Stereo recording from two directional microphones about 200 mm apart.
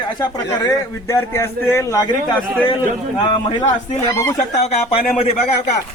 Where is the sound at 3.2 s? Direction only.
20° left (ahead or behind).